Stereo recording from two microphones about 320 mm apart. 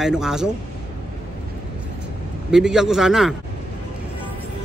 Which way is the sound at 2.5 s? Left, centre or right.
Centre.